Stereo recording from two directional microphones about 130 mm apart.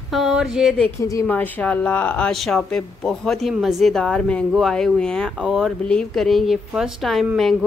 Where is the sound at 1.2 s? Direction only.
15° left (ahead or behind).